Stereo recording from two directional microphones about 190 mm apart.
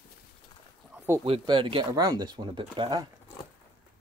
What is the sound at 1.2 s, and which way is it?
Speech, 25° right (ahead or behind).